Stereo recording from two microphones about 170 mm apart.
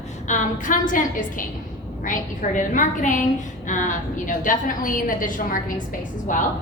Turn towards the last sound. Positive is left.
turn(degrees=50)  # may be behind; listen again after turning